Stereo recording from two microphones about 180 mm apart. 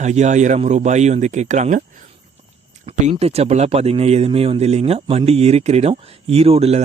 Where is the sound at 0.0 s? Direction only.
40° right (ahead or behind).